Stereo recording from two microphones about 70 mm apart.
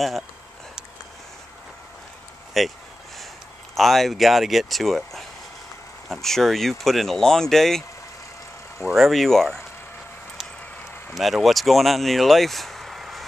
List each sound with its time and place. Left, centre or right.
2.6 s speech: centre
3.7 s speech: centre
8.9 s speech: centre
11.1 s speech: centre